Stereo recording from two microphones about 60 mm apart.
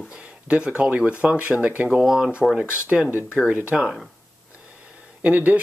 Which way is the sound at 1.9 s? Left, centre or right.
Centre.